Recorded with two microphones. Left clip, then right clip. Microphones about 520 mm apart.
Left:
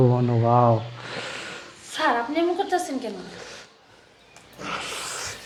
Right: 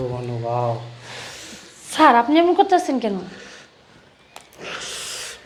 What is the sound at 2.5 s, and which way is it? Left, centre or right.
Speech, right.